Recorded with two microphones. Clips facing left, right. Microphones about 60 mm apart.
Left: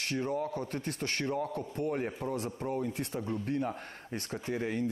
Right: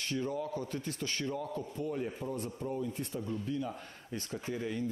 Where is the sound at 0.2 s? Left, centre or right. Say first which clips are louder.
Left 2 dB; left.